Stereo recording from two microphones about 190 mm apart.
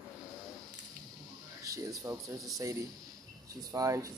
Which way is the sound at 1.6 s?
20° right (ahead or behind).